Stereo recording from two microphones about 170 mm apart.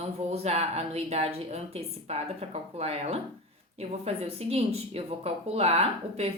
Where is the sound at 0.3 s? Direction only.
35° right (ahead or behind).